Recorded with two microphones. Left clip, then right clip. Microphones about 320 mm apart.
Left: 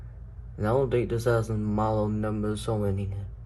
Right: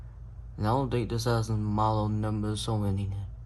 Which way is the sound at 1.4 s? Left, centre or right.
Right.